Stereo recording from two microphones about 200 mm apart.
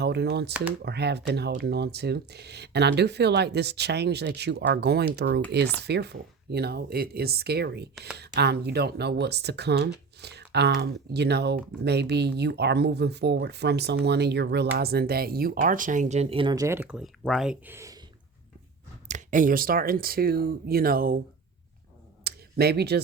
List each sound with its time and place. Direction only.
0.0 s speech: 55° right (ahead or behind); by 18.0 s 15° right (ahead or behind)
19.0 s speech: 40° right (ahead or behind)
22.2 s a sound: 50° right (ahead or behind)